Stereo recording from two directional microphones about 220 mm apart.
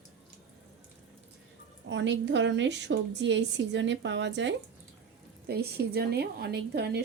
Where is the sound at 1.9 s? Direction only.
55° right (ahead or behind).